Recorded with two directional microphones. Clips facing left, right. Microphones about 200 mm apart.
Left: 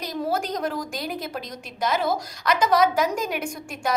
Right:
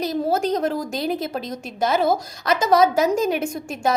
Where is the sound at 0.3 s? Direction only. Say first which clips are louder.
Right 5 dB; 25° right (ahead or behind).